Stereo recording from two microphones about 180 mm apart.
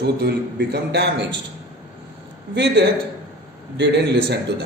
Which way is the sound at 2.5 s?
70° right (ahead or behind).